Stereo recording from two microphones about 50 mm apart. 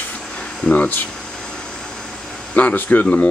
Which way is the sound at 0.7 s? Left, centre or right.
Left.